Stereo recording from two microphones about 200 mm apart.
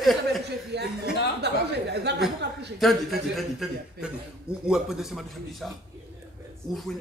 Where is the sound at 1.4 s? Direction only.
55° right (ahead or behind).